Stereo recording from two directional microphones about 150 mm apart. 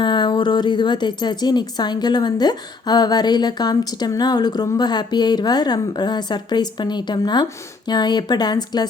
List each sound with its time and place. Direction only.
0.0 s speech: 30° left (ahead or behind)